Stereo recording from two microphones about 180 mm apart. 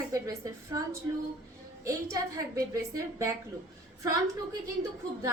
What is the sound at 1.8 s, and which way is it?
A woman's voice, 20° right (ahead or behind).